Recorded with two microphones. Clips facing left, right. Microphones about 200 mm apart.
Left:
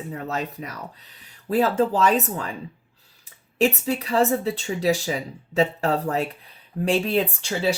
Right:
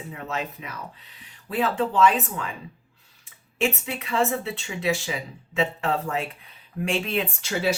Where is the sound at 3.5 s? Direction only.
35° left (ahead or behind).